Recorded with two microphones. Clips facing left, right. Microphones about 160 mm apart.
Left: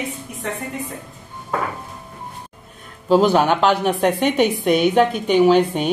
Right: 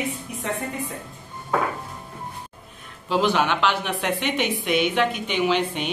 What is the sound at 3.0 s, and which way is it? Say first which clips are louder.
A woman's voice: left 7 dB; 40° left (ahead or behind).